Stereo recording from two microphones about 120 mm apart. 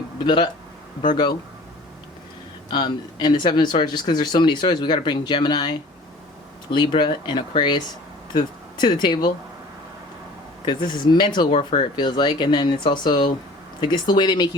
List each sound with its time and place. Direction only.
0.3 s speech: 40° left (ahead or behind)
2.6 s speech: 40° left (ahead or behind)
10.7 s speech: 40° left (ahead or behind)